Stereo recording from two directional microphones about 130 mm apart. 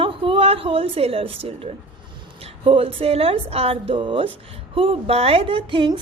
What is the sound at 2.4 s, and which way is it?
A woman's voice, 50° right (ahead or behind).